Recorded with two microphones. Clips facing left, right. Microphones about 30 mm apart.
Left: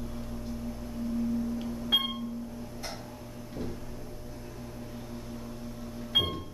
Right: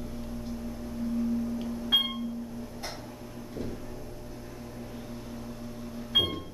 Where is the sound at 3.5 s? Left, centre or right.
Centre.